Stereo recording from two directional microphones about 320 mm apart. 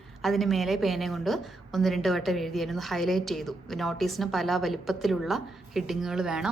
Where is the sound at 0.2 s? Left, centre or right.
Centre.